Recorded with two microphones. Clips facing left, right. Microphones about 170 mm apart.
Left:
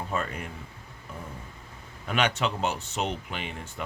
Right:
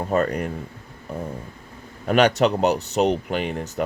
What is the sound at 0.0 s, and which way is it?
Speech, 40° right (ahead or behind).